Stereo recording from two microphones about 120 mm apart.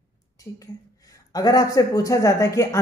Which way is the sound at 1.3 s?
30° left (ahead or behind).